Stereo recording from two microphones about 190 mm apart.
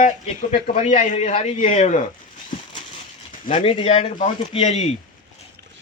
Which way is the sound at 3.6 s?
30° left (ahead or behind).